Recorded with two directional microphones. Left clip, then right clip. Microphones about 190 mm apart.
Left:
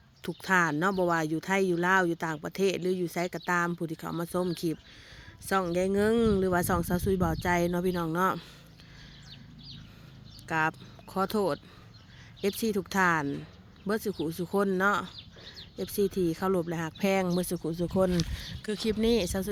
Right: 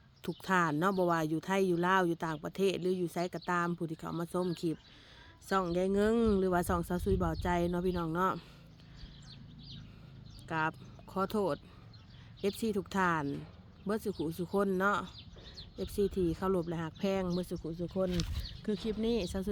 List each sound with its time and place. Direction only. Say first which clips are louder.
0.2 s speech: left 5 dB; centre (ahead or behind)
10.5 s speech: left 6 dB; 10° left (ahead or behind)